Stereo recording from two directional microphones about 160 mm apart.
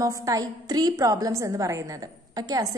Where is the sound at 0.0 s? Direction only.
20° right (ahead or behind).